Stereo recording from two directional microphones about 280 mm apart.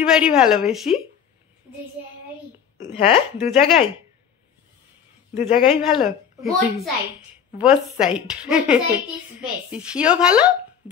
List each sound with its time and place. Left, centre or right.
0.0 s speech: centre
2.8 s a woman's voice: left
5.7 s speech: centre